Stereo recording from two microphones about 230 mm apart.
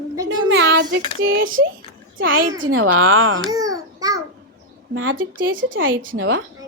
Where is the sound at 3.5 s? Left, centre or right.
Centre.